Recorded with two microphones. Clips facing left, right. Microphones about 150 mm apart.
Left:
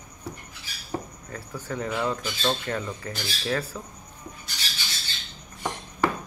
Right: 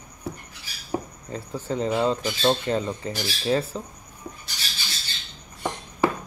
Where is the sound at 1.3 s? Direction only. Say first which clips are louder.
Right 7 dB; 25° right (ahead or behind).